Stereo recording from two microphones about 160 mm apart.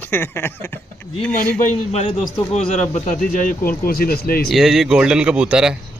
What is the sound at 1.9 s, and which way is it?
A man's voice, 40° left (ahead or behind).